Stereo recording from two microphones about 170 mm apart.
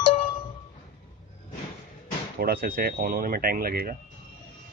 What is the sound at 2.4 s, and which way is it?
Speech, 60° right (ahead or behind).